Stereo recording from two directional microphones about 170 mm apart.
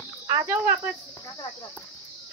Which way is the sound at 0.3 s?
15° right (ahead or behind).